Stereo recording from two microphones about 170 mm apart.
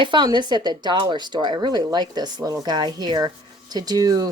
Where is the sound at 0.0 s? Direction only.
30° right (ahead or behind).